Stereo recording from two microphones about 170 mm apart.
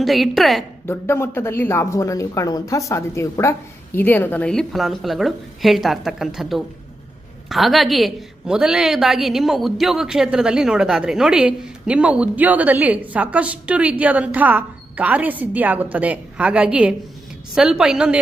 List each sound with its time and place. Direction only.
0.0 s a woman's voice: centre (ahead or behind)
0.9 s a woman's voice: 15° left (ahead or behind); by 18.2 s 5° right (ahead or behind)